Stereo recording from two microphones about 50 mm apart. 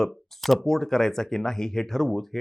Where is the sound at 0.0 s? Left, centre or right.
Centre.